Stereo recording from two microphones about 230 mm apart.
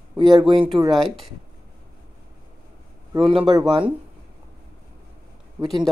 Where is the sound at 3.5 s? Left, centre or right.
Centre.